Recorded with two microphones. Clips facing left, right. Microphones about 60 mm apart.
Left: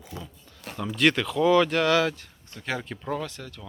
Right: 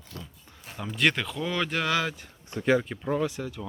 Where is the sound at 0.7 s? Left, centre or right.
Centre.